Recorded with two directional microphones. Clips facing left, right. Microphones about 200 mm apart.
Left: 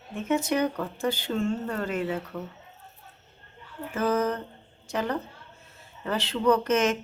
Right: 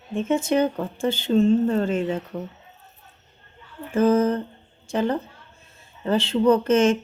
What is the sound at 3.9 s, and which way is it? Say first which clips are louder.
A woman's voice: right 7 dB; 30° right (ahead or behind).